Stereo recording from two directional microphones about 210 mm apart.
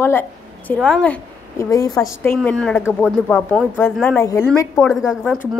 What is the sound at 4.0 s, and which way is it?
Speech, 10° left (ahead or behind).